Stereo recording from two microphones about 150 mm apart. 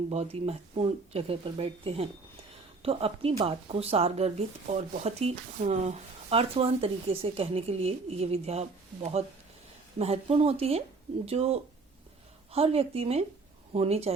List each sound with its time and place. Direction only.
0.1 s speech: 45° right (ahead or behind)